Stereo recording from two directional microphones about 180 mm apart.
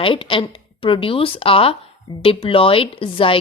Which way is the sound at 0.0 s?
30° left (ahead or behind).